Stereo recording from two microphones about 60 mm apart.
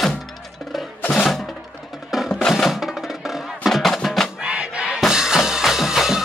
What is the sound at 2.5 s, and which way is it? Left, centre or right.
Music, centre.